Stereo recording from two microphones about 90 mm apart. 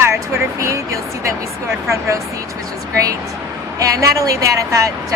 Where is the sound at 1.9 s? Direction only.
35° right (ahead or behind).